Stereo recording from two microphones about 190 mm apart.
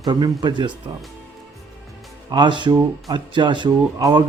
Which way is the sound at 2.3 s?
25° right (ahead or behind).